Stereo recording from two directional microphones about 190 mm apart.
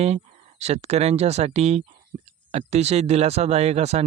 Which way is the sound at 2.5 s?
35° right (ahead or behind).